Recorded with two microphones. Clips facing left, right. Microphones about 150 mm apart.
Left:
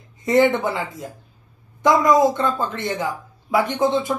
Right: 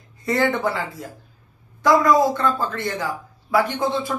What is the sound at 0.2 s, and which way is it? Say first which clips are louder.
Speech: left 4 dB; 20° left (ahead or behind).